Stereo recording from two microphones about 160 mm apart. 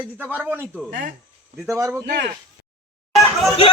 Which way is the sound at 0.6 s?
5° left (ahead or behind).